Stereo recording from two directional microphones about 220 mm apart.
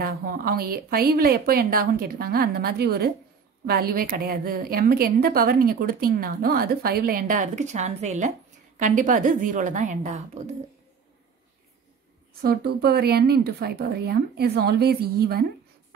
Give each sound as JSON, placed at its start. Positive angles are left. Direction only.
{"t": 0.0, "sound": "a woman's voice", "side_deg": -40}
{"t": 12.4, "sound": "a woman's voice", "side_deg": -45}